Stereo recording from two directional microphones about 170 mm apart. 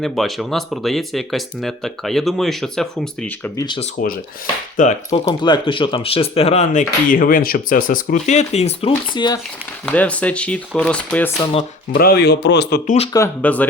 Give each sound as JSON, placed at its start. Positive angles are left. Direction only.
{"t": 0.0, "sound": "speech", "side_deg": 0}
{"t": 4.0, "sound": "speech", "side_deg": 55}
{"t": 5.2, "sound": "speech", "side_deg": 25}
{"t": 9.1, "sound": "speech", "side_deg": 25}
{"t": 9.8, "sound": "speech", "side_deg": 10}
{"t": 11.9, "sound": "a man's voice", "side_deg": 65}
{"t": 13.1, "sound": "speech", "side_deg": 10}